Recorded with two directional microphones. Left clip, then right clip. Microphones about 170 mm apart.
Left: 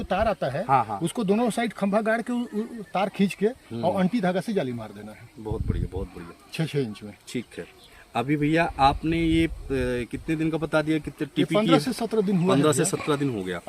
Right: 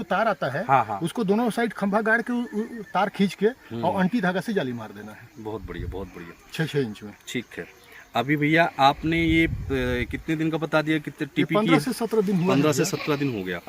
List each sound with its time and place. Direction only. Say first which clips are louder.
0.0 s speech: right 1 dB; 20° left (ahead or behind)
0.7 s speech: right 2 dB; 15° right (ahead or behind)
1.0 s speech: even; 20° left (ahead or behind)
5.5 s speech: left 1 dB; 15° right (ahead or behind)
6.5 s speech: right 2 dB; 20° left (ahead or behind)
7.3 s speech: right 1 dB; 15° right (ahead or behind)
11.5 s speech: even; 20° left (ahead or behind)
12.5 s speech: left 3 dB; 15° right (ahead or behind)